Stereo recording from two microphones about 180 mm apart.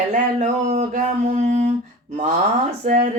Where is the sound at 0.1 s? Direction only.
45° right (ahead or behind).